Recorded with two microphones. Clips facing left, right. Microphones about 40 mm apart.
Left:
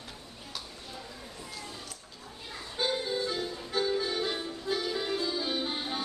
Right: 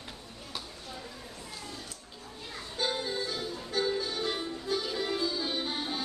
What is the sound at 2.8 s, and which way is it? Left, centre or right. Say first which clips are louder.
Music: left 2 dB; centre.